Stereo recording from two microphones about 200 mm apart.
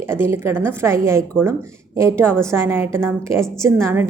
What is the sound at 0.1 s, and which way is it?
A woman's voice, 10° right (ahead or behind).